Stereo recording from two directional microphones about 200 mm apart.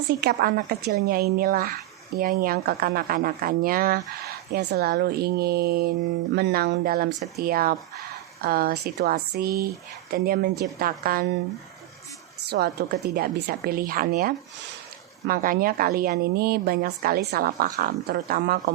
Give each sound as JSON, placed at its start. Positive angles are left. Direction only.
{"t": 0.2, "sound": "a woman's voice", "side_deg": -50}
{"t": 12.5, "sound": "a woman's voice", "side_deg": -50}